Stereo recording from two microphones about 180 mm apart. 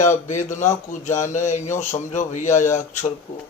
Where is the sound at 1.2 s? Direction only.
45° left (ahead or behind).